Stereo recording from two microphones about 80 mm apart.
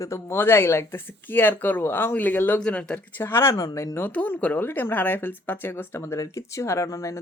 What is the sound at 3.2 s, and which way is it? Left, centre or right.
Speech, left.